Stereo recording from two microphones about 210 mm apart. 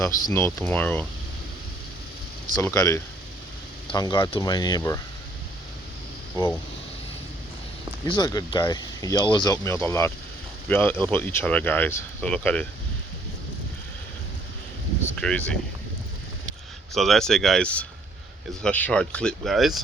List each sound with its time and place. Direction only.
0.0 s speech: 10° left (ahead or behind)
2.6 s speech: 15° left (ahead or behind)
6.3 s speech: 10° left (ahead or behind)
8.0 s speech: 20° left (ahead or behind)
15.1 s speech: 5° left (ahead or behind)
16.9 s speech: centre (ahead or behind)